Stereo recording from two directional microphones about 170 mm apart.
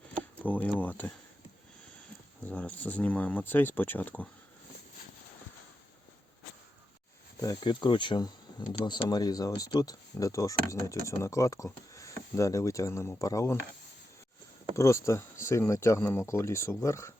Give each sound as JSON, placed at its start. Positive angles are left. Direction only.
{"t": 0.4, "sound": "speech", "side_deg": 10}
{"t": 2.4, "sound": "speech", "side_deg": 10}
{"t": 7.4, "sound": "speech", "side_deg": 25}
{"t": 14.8, "sound": "speech", "side_deg": 15}